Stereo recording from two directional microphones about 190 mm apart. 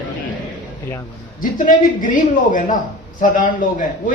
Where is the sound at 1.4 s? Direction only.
45° left (ahead or behind).